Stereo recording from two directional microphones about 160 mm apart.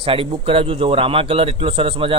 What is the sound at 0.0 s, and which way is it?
Speech, 35° right (ahead or behind).